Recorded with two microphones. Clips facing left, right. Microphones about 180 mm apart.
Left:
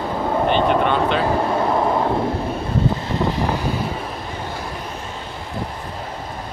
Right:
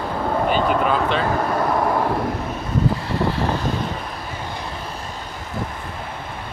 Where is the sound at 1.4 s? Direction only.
25° left (ahead or behind).